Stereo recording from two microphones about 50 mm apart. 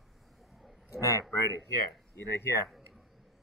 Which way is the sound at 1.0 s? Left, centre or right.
Left.